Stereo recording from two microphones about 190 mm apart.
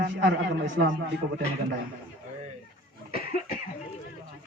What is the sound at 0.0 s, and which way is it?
Speech, 70° right (ahead or behind).